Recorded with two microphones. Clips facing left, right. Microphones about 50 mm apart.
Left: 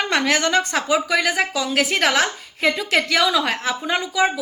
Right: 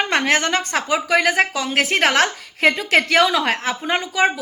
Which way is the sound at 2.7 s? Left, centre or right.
Right.